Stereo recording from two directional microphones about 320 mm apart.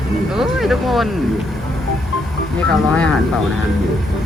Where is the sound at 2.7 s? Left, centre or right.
Centre.